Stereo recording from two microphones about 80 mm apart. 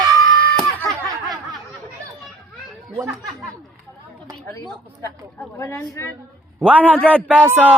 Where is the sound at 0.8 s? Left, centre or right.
Right.